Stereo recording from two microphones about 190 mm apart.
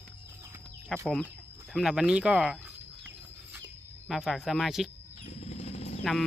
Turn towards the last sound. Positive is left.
turn(degrees=35)  # may be behind; listen again after turning